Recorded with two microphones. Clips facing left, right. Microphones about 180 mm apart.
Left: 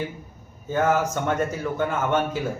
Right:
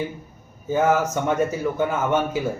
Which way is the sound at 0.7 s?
10° right (ahead or behind).